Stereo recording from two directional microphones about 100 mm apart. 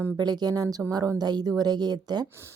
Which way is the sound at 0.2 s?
45° right (ahead or behind).